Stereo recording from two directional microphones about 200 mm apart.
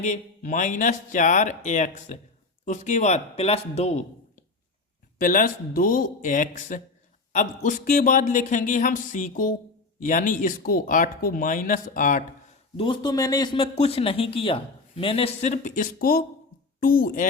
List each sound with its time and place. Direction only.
0.0 s speech: 35° left (ahead or behind)
12.7 s a child's voice: 25° left (ahead or behind); by 17.2 s 45° left (ahead or behind)